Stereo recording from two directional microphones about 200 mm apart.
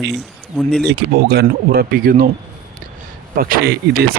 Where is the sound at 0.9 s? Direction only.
55° right (ahead or behind).